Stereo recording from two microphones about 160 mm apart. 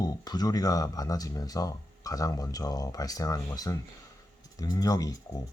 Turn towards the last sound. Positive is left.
turn(degrees=25)  # may be behind; listen again after turning